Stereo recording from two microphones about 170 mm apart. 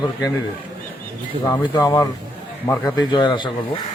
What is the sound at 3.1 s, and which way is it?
Speech, 30° left (ahead or behind).